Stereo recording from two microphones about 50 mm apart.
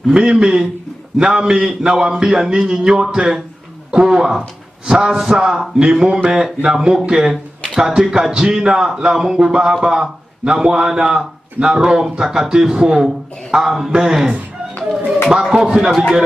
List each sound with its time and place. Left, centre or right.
0.1 s a man's voice: centre